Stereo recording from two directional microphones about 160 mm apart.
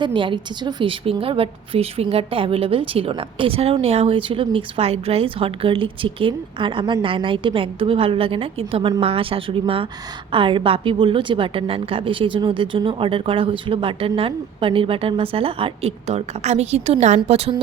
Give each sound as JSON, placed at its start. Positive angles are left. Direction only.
{"t": 0.0, "sound": "a woman's voice", "side_deg": -30}